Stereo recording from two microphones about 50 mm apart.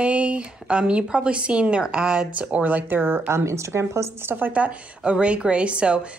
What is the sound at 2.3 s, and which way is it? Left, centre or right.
A woman's voice, right.